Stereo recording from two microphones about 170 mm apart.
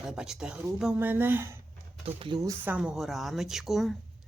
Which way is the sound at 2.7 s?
5° right (ahead or behind).